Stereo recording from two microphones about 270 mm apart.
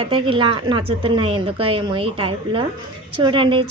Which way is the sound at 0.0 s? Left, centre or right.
Centre.